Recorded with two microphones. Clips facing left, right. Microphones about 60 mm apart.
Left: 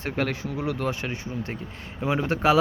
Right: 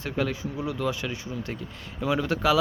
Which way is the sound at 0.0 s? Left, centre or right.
Left.